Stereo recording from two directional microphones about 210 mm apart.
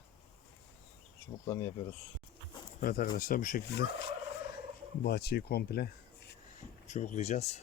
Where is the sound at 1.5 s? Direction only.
15° left (ahead or behind).